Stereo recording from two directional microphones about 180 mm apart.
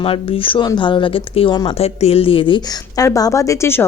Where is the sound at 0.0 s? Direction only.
30° left (ahead or behind).